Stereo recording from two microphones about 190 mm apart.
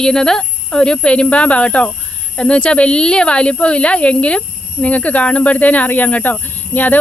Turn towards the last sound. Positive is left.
turn(degrees=10)  # may be behind; listen again after turning